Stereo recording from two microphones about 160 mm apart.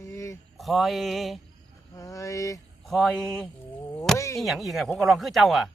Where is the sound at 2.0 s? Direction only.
20° left (ahead or behind).